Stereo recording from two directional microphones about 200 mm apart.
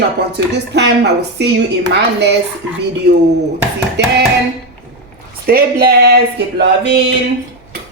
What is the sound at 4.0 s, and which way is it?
Speech, 55° right (ahead or behind).